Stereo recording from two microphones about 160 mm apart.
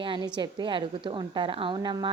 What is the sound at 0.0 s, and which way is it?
A woman's voice, 30° right (ahead or behind).